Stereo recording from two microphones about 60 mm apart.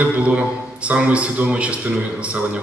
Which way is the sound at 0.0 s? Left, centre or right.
Centre.